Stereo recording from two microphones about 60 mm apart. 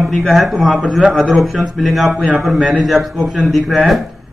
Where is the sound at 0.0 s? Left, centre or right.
Centre.